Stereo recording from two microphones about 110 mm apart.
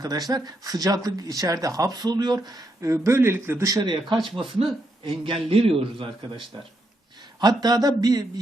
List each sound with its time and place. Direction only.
0.0 s speech: 35° right (ahead or behind)
2.9 s a man's voice: 25° right (ahead or behind)
3.8 s a man's voice: 45° right (ahead or behind)
7.3 s speech: 35° right (ahead or behind)